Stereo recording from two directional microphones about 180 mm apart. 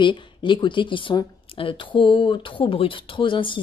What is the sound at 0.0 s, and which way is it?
A woman's voice, 25° left (ahead or behind).